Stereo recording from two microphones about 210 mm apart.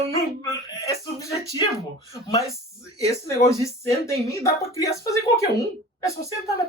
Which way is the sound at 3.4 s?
15° left (ahead or behind).